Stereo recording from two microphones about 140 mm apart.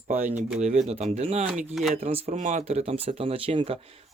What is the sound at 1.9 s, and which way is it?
Speech, 45° right (ahead or behind).